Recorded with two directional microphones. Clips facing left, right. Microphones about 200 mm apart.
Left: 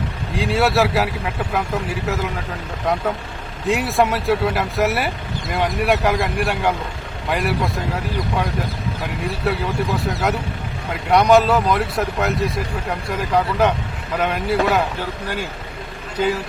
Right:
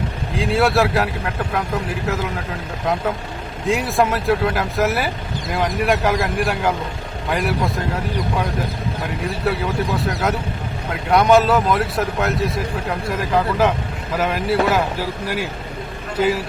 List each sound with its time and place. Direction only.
0.3 s speech: centre (ahead or behind)
9.4 s speech: centre (ahead or behind)